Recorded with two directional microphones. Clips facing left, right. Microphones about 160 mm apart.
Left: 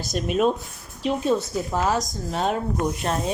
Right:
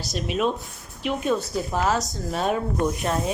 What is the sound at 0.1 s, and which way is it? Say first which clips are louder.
Speech: left 3 dB; 45° left (ahead or behind).